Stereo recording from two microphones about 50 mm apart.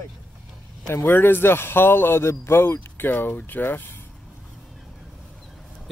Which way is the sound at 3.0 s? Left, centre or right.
Left.